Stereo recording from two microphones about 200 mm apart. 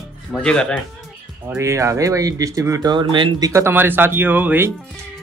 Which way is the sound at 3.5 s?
10° right (ahead or behind).